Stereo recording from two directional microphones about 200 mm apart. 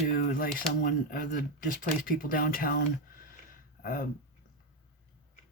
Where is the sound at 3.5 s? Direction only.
45° left (ahead or behind).